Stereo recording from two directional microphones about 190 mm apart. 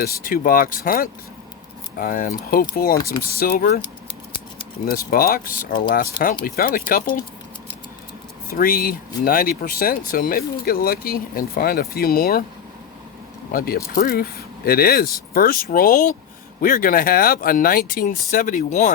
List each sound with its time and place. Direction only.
0.0 s speech: 50° left (ahead or behind)
4.9 s speech: 50° left (ahead or behind)
8.5 s speech: 50° left (ahead or behind)
13.5 s speech: 50° left (ahead or behind)